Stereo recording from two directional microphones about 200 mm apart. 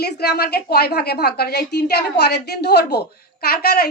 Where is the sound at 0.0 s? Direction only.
55° left (ahead or behind).